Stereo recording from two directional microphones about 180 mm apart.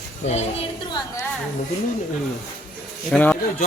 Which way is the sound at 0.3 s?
35° left (ahead or behind).